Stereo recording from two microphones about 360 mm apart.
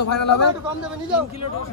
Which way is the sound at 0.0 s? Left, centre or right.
Left.